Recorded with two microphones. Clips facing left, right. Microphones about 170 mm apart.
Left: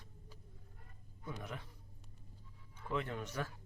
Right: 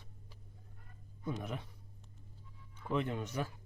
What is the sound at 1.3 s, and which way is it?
Speech, 15° right (ahead or behind).